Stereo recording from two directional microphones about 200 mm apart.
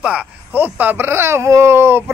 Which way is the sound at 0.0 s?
5° right (ahead or behind).